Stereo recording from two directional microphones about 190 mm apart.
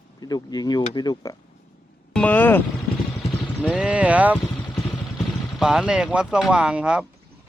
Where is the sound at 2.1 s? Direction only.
10° left (ahead or behind).